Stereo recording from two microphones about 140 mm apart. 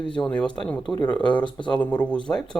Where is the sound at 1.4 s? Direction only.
35° left (ahead or behind).